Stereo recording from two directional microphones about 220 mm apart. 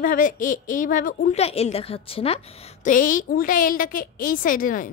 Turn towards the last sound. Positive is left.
turn(degrees=40)  # may be behind; listen again after turning